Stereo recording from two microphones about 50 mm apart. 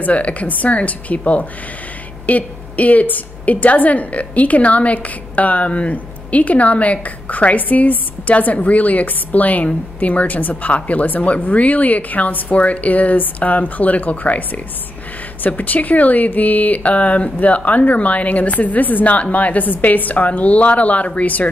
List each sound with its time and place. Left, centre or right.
0.0 s a woman's voice: left